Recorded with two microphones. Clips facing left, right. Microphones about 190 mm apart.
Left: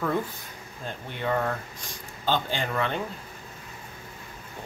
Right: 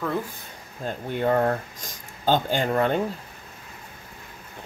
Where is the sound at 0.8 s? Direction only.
45° right (ahead or behind).